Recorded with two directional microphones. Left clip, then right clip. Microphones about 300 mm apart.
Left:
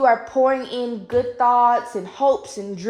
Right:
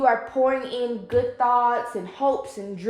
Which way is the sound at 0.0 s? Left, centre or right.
Left.